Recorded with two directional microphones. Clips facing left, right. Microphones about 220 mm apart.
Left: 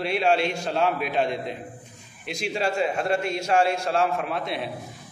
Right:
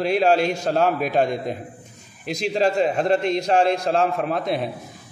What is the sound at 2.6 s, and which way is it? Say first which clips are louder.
A man's voice: right 5 dB; 35° right (ahead or behind).